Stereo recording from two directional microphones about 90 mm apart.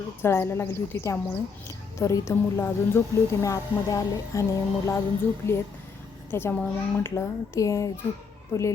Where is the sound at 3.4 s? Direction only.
35° left (ahead or behind).